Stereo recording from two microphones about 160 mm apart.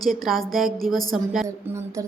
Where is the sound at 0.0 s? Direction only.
Centre (ahead or behind).